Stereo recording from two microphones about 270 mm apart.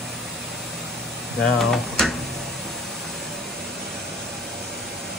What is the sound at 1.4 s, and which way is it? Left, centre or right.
Speech, centre.